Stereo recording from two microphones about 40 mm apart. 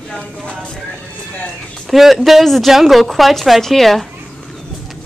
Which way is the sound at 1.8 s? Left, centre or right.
Centre.